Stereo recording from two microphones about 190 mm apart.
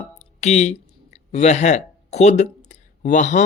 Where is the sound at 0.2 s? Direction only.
35° left (ahead or behind).